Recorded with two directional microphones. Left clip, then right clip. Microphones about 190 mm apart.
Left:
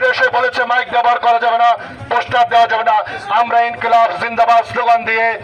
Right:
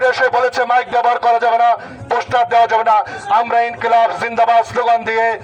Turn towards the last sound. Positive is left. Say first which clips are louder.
# left 1 dB
turn(degrees=-40)  # may be behind; listen again after turning